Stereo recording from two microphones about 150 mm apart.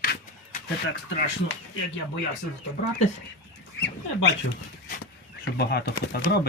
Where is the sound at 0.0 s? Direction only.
80° left.